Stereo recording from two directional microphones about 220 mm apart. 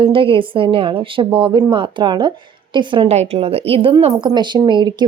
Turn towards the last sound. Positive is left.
turn(degrees=-20)  # may be behind; listen again after turning